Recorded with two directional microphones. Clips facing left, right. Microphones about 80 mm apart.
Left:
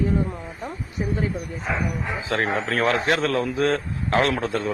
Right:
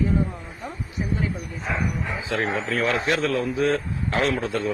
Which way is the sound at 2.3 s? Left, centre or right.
Left.